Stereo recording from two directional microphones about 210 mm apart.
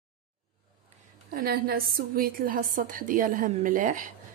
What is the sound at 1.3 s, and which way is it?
A woman's voice, 45° right (ahead or behind).